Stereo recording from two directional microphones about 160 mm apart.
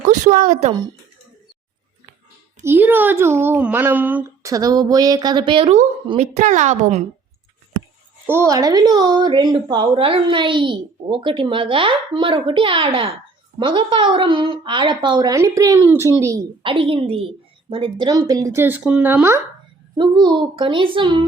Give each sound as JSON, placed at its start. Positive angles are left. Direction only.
{"t": 0.1, "sound": "a woman's voice", "side_deg": -55}
{"t": 2.6, "sound": "speech", "side_deg": -15}
{"t": 6.1, "sound": "a woman's voice", "side_deg": -45}
{"t": 8.3, "sound": "speech", "side_deg": -20}
{"t": 16.6, "sound": "speech", "side_deg": -35}
{"t": 20.0, "sound": "speech", "side_deg": -30}